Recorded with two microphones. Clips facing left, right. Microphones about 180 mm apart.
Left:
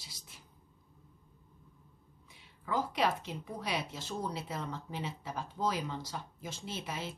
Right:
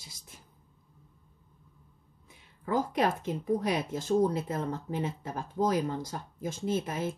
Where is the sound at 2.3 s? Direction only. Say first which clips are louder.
Right 5 dB; 50° right (ahead or behind).